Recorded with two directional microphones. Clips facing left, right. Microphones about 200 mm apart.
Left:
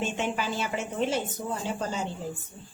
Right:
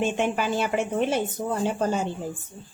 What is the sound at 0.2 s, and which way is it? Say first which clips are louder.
A woman's voice: right 5 dB; 55° right (ahead or behind).